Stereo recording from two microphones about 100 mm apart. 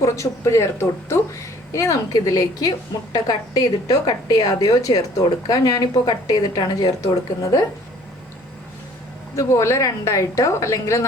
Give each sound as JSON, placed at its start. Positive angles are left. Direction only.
{"t": 0.0, "sound": "a woman's voice", "side_deg": 30}
{"t": 9.3, "sound": "a woman's voice", "side_deg": 30}